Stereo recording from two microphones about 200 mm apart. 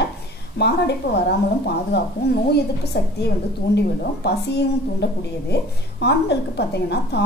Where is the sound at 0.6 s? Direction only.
55° left (ahead or behind).